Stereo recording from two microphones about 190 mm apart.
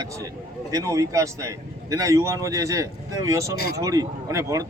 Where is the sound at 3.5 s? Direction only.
55° left (ahead or behind).